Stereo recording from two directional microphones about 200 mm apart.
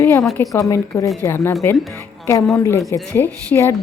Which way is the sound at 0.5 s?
15° left (ahead or behind).